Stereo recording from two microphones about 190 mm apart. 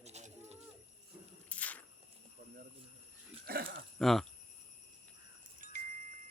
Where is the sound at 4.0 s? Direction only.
Centre (ahead or behind).